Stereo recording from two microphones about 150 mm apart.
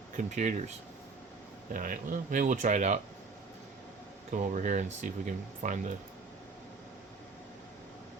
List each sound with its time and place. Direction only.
0.2 s speech: 55° right (ahead or behind)
1.7 s speech: 65° right (ahead or behind)
4.3 s speech: 55° right (ahead or behind)